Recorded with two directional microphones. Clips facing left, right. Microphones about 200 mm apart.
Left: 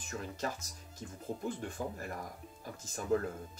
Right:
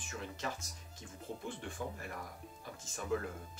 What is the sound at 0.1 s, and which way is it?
Speech, 40° left (ahead or behind).